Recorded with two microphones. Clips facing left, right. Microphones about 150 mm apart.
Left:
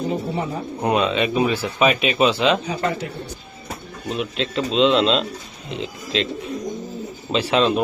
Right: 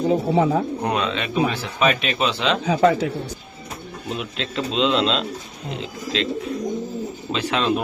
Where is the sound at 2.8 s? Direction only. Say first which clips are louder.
Right 7 dB; 90° right.